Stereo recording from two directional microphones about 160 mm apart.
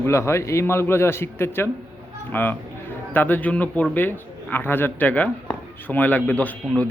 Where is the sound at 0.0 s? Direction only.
15° left (ahead or behind).